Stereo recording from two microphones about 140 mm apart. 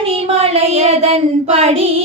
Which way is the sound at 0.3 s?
45° right (ahead or behind).